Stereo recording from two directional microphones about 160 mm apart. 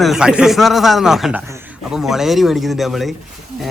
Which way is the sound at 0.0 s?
5° right (ahead or behind).